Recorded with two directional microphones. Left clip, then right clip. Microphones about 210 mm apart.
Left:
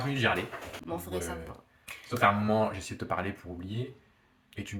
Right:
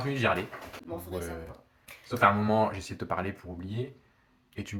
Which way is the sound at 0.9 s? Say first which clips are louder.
Left 2 dB; 40° left (ahead or behind).